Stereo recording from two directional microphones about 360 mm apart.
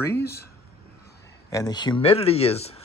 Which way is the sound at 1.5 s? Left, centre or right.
Centre.